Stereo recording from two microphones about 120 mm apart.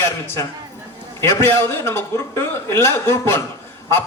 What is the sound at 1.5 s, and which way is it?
A man's voice, 20° left (ahead or behind).